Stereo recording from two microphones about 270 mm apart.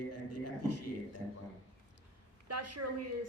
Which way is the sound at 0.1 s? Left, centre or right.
Left.